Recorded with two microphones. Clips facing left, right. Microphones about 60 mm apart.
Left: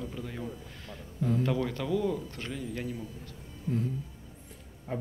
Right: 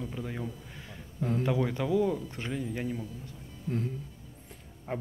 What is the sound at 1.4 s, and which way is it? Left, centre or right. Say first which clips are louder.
Speech: right 1 dB; centre.